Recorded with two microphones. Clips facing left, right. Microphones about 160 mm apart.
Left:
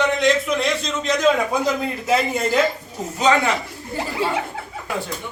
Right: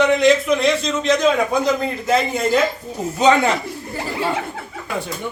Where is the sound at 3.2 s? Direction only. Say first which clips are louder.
Right 3 dB; 25° right (ahead or behind).